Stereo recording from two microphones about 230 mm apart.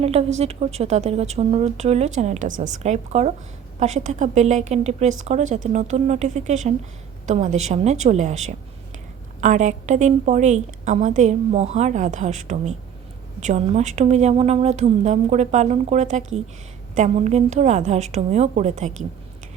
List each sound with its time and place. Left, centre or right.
0.0 s a woman's voice: right